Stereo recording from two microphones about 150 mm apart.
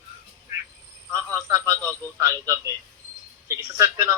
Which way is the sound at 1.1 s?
20° right (ahead or behind).